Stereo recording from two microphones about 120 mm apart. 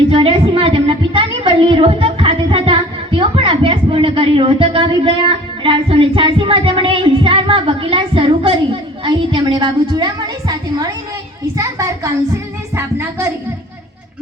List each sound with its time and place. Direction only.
0.1 s a woman's voice: 50° right (ahead or behind); by 13.3 s 20° right (ahead or behind)